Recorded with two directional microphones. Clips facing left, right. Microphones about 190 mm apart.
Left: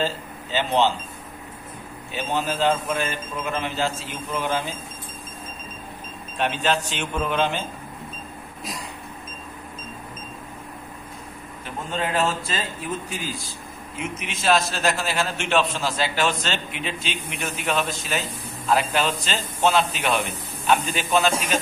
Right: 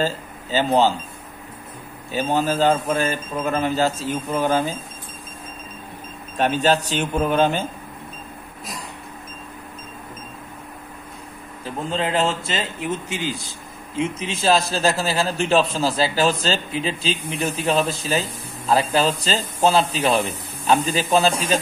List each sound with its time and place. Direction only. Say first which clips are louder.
0.0 s speech: right 2 dB; 40° right (ahead or behind)
2.1 s a man's voice: right 5 dB; 40° right (ahead or behind)
6.3 s a man's voice: right 5 dB; 40° right (ahead or behind)
11.9 s a man's voice: right 2 dB; 25° right (ahead or behind)